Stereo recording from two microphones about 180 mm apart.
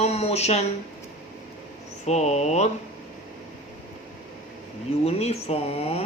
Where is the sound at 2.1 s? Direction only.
40° left (ahead or behind).